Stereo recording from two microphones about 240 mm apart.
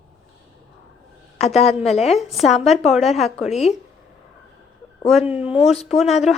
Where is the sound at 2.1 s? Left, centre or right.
Centre.